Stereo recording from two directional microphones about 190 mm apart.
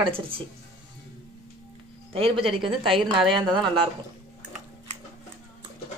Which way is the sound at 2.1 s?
30° right (ahead or behind).